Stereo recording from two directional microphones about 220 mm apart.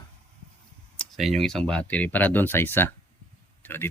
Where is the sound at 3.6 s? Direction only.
10° left (ahead or behind).